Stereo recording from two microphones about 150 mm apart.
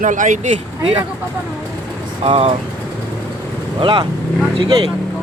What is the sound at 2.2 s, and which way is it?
Speech, 40° right (ahead or behind).